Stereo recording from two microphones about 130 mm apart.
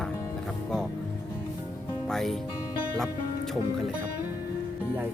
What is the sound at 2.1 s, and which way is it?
Speech, centre (ahead or behind).